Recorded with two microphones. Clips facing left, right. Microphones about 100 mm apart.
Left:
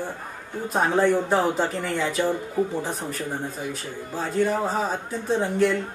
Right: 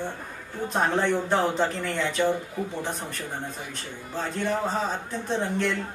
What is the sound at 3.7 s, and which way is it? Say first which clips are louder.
Speech: left 5 dB; 5° left (ahead or behind).